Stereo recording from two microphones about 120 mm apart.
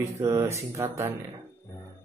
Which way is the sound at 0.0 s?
25° right (ahead or behind).